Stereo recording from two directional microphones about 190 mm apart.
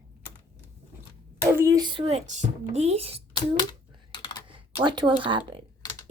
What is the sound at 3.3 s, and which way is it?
Computer keyboard, 20° left (ahead or behind).